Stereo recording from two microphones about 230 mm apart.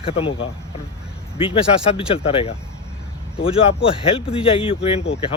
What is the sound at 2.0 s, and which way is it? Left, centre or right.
Speech, left.